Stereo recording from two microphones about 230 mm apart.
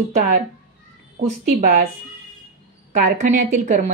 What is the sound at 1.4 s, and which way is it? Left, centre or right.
Speech, right.